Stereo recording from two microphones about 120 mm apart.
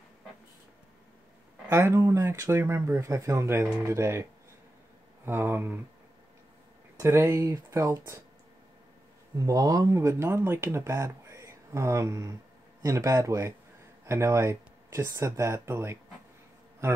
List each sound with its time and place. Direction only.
1.7 s speech: 20° right (ahead or behind)
7.0 s speech: 20° right (ahead or behind)
9.5 s speech: 30° right (ahead or behind)